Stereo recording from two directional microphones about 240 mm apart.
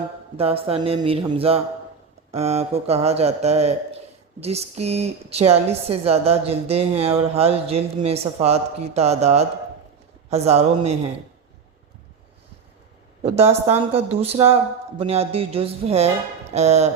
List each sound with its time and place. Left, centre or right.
0.3 s a woman's voice: right
13.2 s a woman's voice: right